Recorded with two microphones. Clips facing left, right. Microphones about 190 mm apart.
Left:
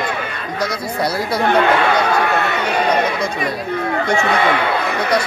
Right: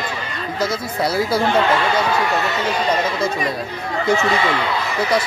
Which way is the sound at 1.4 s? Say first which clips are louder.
Left 6 dB; 60° left (ahead or behind).